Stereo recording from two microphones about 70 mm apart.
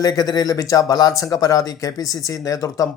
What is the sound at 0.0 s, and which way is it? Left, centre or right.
Speech, left.